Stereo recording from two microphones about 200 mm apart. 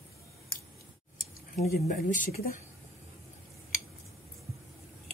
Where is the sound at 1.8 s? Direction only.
40° left (ahead or behind).